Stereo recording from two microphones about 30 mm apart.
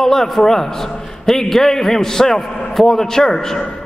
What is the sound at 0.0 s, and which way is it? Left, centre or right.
A man's voice, centre.